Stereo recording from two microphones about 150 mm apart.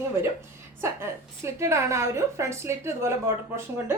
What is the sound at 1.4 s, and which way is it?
A woman's voice, 20° right (ahead or behind).